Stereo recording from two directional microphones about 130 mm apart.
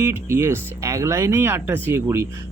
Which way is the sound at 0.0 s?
20° right (ahead or behind).